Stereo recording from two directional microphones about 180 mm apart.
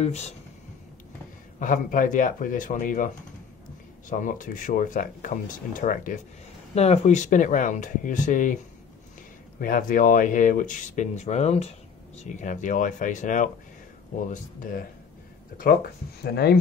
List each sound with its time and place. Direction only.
0.0 s speech: 35° left (ahead or behind)
1.6 s speech: 50° left (ahead or behind)
4.1 s speech: 45° left (ahead or behind)
6.7 s speech: 35° left (ahead or behind)
9.6 s speech: 50° left (ahead or behind)